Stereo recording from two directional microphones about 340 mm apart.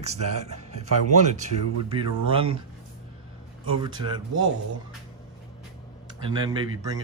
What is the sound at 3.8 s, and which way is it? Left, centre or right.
Speech, centre.